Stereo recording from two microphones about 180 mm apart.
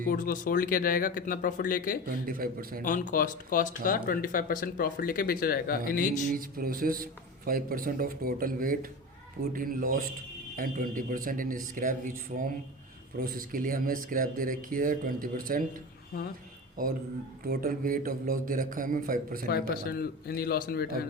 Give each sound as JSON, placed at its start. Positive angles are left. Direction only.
{"t": 0.1, "sound": "speech", "side_deg": 50}
{"t": 2.0, "sound": "a man's voice", "side_deg": -55}
{"t": 2.8, "sound": "speech", "side_deg": 45}
{"t": 6.3, "sound": "a man's voice", "side_deg": -50}
{"t": 13.1, "sound": "a man's voice", "side_deg": -55}
{"t": 16.8, "sound": "a man's voice", "side_deg": -50}
{"t": 19.5, "sound": "a man's voice", "side_deg": 60}